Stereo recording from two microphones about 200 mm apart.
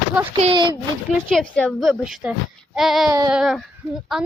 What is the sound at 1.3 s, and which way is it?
Speech, 5° left (ahead or behind).